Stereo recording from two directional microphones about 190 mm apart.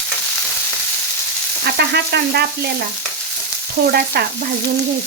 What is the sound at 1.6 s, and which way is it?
Frying, 55° right (ahead or behind).